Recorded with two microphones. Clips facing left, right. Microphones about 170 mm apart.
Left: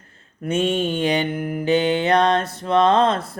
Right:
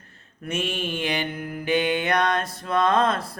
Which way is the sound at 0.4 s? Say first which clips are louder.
Left 8 dB; 30° left (ahead or behind).